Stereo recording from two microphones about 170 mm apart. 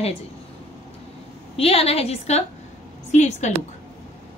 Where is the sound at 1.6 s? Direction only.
35° left (ahead or behind).